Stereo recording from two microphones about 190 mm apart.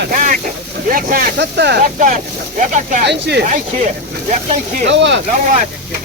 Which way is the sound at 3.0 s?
60° right (ahead or behind).